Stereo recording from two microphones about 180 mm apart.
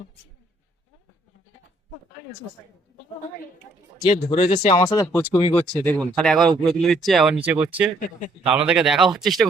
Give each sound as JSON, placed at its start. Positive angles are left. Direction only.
{"t": 4.0, "sound": "speech", "side_deg": 25}
{"t": 5.0, "sound": "speech", "side_deg": 15}
{"t": 5.4, "sound": "speech", "side_deg": 30}
{"t": 5.6, "sound": "speech", "side_deg": 5}
{"t": 7.9, "sound": "a man's voice", "side_deg": 50}
{"t": 8.4, "sound": "speech", "side_deg": -5}